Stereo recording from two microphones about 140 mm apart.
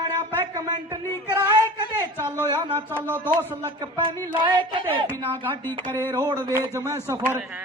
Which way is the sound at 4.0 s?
35° right (ahead or behind).